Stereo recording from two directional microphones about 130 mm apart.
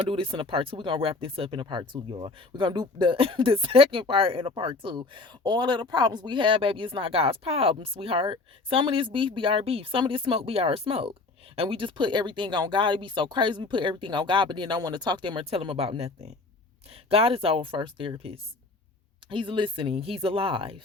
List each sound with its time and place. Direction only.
0.1 s speech: 45° right (ahead or behind)